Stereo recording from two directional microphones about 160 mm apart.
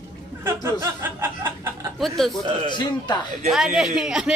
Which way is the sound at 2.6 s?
25° left (ahead or behind).